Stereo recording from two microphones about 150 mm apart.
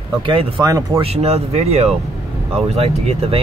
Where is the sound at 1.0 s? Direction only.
45° right (ahead or behind).